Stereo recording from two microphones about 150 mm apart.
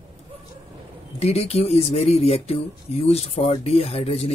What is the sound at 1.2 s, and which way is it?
Speech, 45° left (ahead or behind).